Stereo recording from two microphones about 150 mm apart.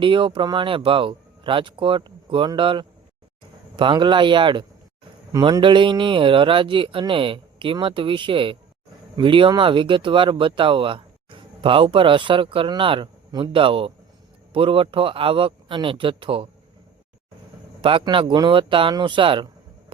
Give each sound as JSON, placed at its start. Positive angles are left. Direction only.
{"t": 0.0, "sound": "speech", "side_deg": -35}
{"t": 17.8, "sound": "speech", "side_deg": -35}